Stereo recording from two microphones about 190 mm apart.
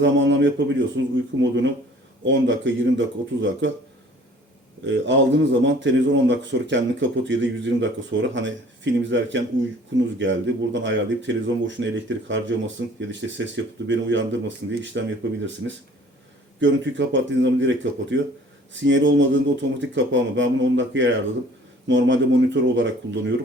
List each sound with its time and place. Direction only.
0.0 s speech: 75° right (ahead or behind)
4.9 s speech: 75° right (ahead or behind)
15.6 s speech: 80° right